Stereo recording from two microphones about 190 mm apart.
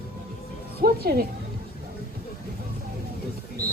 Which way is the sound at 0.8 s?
50° right (ahead or behind).